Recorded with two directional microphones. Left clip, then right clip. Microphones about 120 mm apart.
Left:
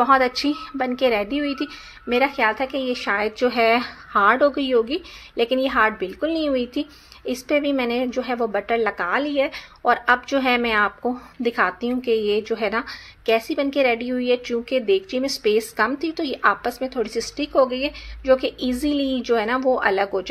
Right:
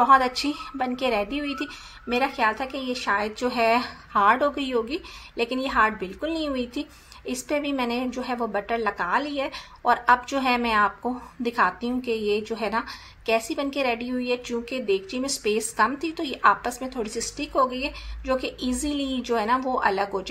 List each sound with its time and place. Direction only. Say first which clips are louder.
0.0 s a woman's voice: left 1 dB; 25° left (ahead or behind)